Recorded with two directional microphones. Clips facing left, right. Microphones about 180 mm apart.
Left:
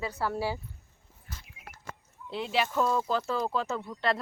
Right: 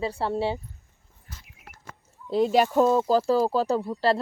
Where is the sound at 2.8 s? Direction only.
30° right (ahead or behind).